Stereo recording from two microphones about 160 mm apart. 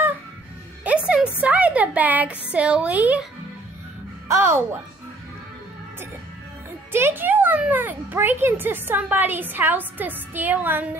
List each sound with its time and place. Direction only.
1.0 s a sound: 5° right (ahead or behind)
2.5 s speech: 5° right (ahead or behind)
4.3 s speech: 15° right (ahead or behind)
6.9 s speech: 15° right (ahead or behind)